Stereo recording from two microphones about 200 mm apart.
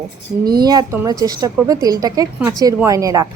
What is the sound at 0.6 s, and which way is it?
Speech, 20° right (ahead or behind).